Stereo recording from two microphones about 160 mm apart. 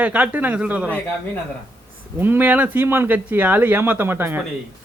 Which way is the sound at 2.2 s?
10° right (ahead or behind).